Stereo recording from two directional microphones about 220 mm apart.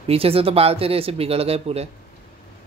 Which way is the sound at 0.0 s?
25° right (ahead or behind).